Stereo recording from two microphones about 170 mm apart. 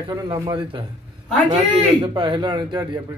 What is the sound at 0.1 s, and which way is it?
Speech, 25° right (ahead or behind).